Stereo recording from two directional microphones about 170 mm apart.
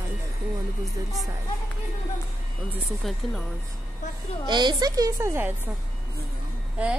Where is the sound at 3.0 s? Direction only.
Centre (ahead or behind).